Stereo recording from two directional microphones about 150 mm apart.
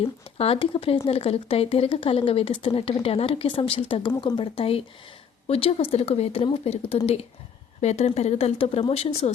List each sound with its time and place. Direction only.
0.0 s speech: 40° left (ahead or behind)